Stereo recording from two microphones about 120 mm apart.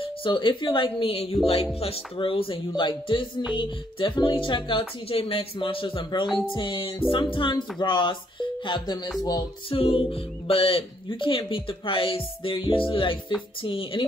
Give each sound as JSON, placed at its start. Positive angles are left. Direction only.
{"t": 0.0, "sound": "speech", "side_deg": 45}
{"t": 9.7, "sound": "speech", "side_deg": 50}